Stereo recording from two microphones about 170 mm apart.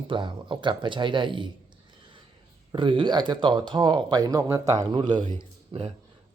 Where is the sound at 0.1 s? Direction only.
30° right (ahead or behind).